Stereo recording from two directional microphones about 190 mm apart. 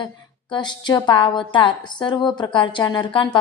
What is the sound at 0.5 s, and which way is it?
A woman's voice, 25° left (ahead or behind).